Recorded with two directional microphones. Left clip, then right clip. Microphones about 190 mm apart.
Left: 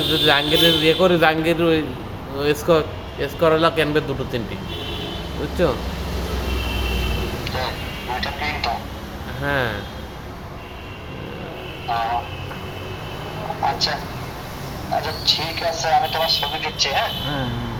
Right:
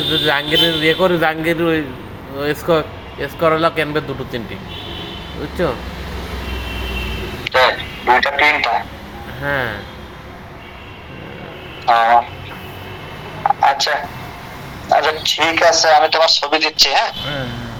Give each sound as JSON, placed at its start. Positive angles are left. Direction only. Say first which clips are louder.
{"t": 0.1, "sound": "speech", "louder": "right 1 dB", "side_deg": 0}
{"t": 5.6, "sound": "speech", "louder": "right 1 dB", "side_deg": 0}
{"t": 7.4, "sound": "vehicle", "louder": "right 15 dB", "side_deg": -40}
{"t": 8.1, "sound": "speech", "louder": "right 13 dB", "side_deg": -40}
{"t": 9.4, "sound": "speech", "louder": "right 2 dB", "side_deg": 0}
{"t": 11.9, "sound": "speech", "louder": "right 10 dB", "side_deg": -40}
{"t": 13.7, "sound": "a man's voice", "louder": "right 6 dB", "side_deg": -40}